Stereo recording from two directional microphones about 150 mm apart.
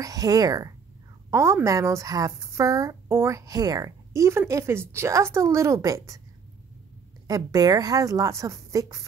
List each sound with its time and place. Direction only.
0.0 s speech: 25° right (ahead or behind)
7.2 s speech: 25° right (ahead or behind)